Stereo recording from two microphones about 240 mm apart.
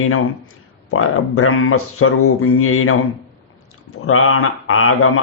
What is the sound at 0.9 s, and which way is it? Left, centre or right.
Speech, left.